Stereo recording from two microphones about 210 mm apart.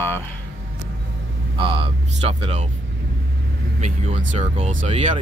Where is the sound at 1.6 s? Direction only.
25° right (ahead or behind).